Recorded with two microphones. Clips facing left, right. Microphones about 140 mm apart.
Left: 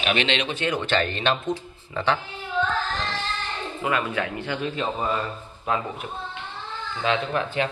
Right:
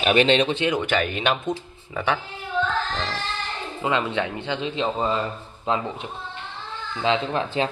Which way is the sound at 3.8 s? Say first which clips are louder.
Right 2 dB; 25° right (ahead or behind).